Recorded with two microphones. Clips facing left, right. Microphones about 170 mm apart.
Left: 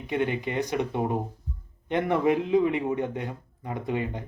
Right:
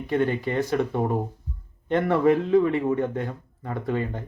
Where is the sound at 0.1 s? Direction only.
15° left (ahead or behind).